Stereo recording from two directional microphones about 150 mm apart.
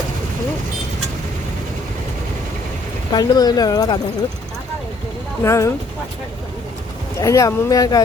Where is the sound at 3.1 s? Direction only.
25° left (ahead or behind).